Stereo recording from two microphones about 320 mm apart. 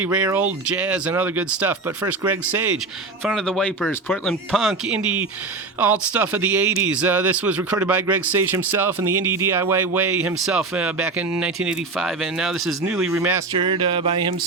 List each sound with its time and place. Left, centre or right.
0.0 s speech: centre
5.8 s speech: centre
13.6 s speech: centre